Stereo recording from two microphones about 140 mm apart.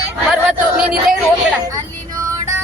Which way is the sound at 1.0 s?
5° right (ahead or behind).